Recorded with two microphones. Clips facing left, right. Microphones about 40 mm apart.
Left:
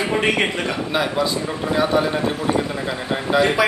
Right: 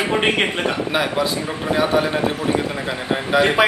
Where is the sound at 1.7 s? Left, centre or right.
Centre.